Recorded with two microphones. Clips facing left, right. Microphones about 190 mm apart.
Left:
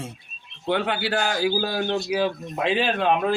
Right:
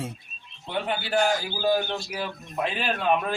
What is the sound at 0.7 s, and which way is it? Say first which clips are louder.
A man's voice: left 5 dB; 90° left.